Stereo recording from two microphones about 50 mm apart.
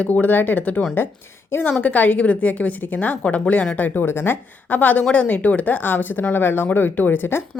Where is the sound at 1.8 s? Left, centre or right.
Left.